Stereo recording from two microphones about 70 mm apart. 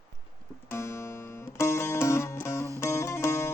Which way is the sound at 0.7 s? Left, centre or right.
Left.